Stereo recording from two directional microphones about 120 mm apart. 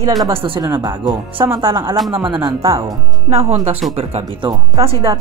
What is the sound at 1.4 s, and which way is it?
Speech, 30° right (ahead or behind).